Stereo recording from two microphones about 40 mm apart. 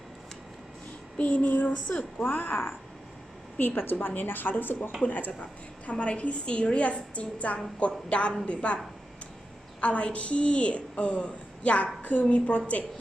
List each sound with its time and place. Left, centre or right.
1.2 s a woman's voice: left
2.1 s speech: left
3.6 s speech: left
5.0 s a woman's voice: left
9.8 s a woman's voice: left